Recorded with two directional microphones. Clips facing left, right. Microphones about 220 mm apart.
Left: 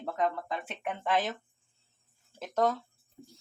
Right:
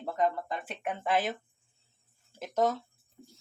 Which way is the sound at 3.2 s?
25° left (ahead or behind).